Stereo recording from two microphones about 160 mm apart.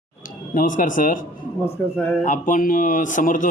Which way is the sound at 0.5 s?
55° left (ahead or behind).